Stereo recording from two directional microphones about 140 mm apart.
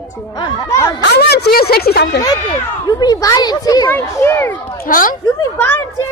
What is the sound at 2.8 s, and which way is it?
Speech, 30° left (ahead or behind).